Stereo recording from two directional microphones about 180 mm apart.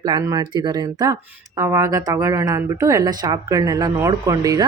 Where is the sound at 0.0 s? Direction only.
20° right (ahead or behind).